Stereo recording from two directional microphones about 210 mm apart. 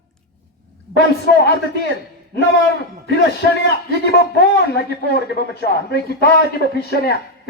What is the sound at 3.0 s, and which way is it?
A man's voice, 55° left (ahead or behind).